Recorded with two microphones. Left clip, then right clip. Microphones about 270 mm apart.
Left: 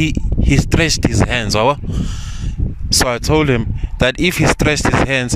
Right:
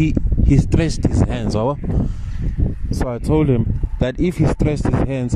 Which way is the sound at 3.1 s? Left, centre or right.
Left.